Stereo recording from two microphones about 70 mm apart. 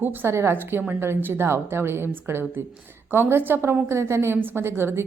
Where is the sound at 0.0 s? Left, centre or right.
Right.